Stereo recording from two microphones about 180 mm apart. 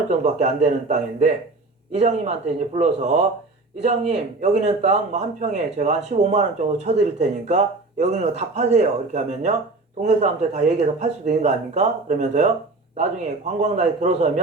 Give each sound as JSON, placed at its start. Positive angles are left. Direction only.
{"t": 0.1, "sound": "speech", "side_deg": -40}